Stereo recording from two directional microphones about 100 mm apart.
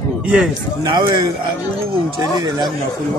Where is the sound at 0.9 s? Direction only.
45° right (ahead or behind).